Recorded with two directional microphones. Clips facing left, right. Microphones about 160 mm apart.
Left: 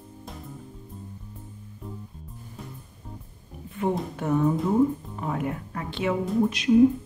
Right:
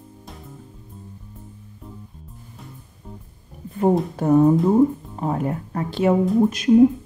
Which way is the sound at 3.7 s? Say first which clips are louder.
Right 8 dB; 40° right (ahead or behind).